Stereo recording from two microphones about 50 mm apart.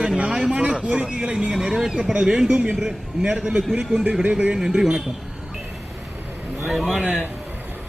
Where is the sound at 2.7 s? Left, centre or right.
Centre.